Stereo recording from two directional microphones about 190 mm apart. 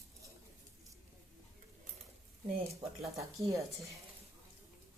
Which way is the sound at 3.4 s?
15° right (ahead or behind).